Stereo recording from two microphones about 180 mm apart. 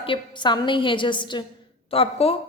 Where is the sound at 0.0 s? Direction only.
25° left (ahead or behind).